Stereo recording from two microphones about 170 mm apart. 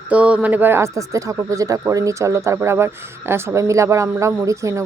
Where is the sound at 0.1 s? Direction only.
5° right (ahead or behind).